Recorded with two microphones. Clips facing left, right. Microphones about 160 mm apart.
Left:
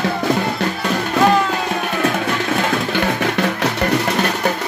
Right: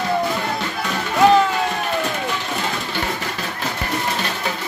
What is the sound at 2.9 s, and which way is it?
Music, 65° left (ahead or behind).